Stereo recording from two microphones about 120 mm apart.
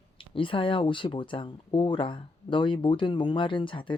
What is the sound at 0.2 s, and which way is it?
Speech, 45° left (ahead or behind).